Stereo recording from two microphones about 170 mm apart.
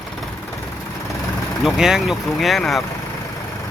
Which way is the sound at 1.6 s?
5° right (ahead or behind).